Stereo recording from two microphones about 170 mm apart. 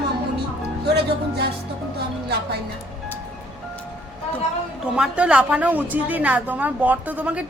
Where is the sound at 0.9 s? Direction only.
70° right (ahead or behind).